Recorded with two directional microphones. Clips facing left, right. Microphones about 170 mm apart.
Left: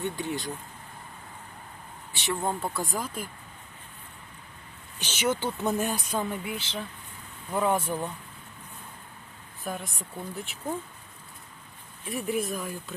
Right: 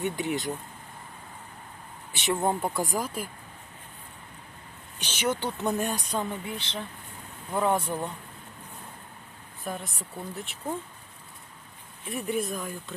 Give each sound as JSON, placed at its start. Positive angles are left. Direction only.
{"t": 0.0, "sound": "speech", "side_deg": -20}
{"t": 2.1, "sound": "speech", "side_deg": -20}
{"t": 5.1, "sound": "speech", "side_deg": 5}
{"t": 9.6, "sound": "speech", "side_deg": 0}
{"t": 12.0, "sound": "speech", "side_deg": 0}